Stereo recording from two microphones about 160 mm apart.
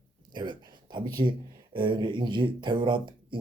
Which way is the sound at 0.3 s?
30° right (ahead or behind).